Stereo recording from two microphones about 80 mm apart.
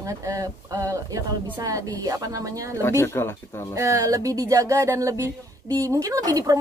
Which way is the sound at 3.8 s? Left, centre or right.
Right.